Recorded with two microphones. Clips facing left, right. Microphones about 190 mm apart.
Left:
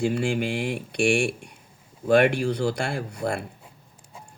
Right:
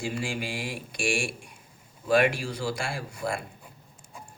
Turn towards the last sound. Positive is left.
turn(degrees=60)  # may be behind; listen again after turning